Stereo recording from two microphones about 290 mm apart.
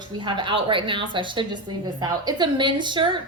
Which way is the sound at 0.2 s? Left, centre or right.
Centre.